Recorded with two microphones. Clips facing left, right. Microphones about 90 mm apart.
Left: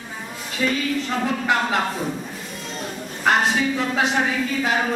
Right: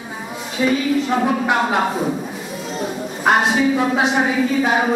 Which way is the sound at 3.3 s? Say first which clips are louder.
Right 4 dB; 5° right (ahead or behind).